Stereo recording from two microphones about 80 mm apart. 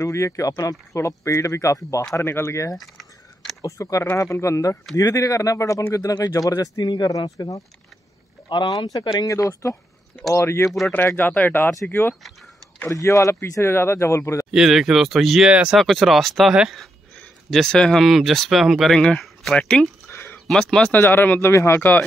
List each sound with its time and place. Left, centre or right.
0.0 s speech: left
0.9 s speech: left
2.1 s speech: left
2.7 s keys jangling: centre
3.6 s speech: left
8.5 s speech: left
12.9 s speech: left
14.5 s speech: centre
15.5 s speech: centre
15.8 s speech: centre
20.1 s a sound: left
20.4 s speech: centre
20.9 s speech: left